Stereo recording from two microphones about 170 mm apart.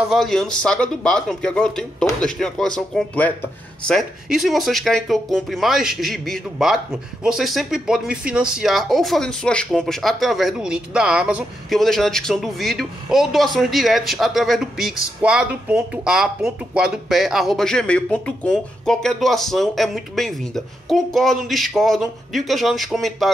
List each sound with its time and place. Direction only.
0.1 s speech: centre (ahead or behind)